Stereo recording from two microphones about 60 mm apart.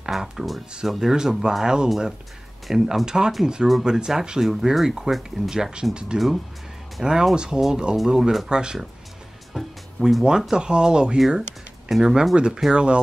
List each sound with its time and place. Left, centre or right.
0.0 s speech: centre
6.1 s speech: centre
9.5 s music: centre
10.5 s speech: centre